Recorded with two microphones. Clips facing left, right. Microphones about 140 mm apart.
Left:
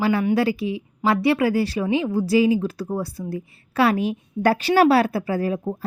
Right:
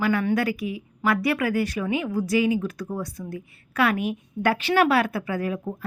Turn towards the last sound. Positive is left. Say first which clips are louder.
# left 4 dB
turn(degrees=30)  # may be behind; listen again after turning